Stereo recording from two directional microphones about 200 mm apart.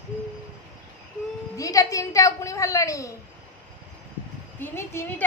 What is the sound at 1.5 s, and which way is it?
Speech, 15° left (ahead or behind).